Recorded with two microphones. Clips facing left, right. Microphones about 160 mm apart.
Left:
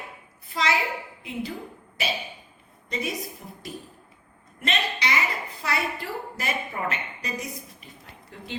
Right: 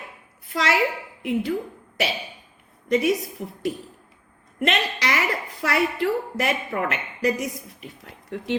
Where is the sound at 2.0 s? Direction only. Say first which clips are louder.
Right 4 dB; 75° right (ahead or behind).